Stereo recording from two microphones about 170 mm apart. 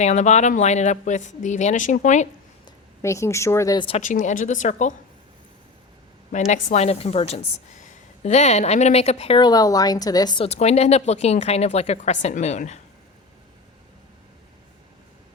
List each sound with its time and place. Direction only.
0.0 s speech: 45° left (ahead or behind)
2.6 s speech: 15° left (ahead or behind)
3.8 s speech: 35° left (ahead or behind)
4.0 s speech: 45° left (ahead or behind)
6.5 s speech: 40° left (ahead or behind)
9.4 s speech: 20° left (ahead or behind); by 12.8 s 45° left (ahead or behind)